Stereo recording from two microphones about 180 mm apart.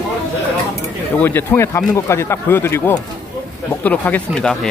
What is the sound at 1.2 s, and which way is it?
Speech, 10° left (ahead or behind).